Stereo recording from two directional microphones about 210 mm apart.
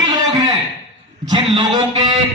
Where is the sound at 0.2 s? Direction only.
20° right (ahead or behind).